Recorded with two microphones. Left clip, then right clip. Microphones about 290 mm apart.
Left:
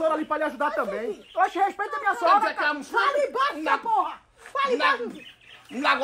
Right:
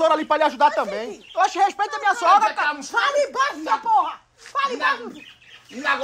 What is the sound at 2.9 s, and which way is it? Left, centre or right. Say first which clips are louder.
Speech: right 3 dB; right.